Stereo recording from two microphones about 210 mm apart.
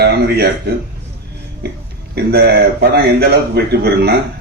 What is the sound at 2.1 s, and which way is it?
A man's voice, 50° right (ahead or behind).